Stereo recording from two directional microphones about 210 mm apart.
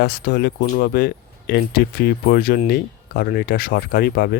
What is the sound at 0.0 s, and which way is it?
Speech, 50° left (ahead or behind).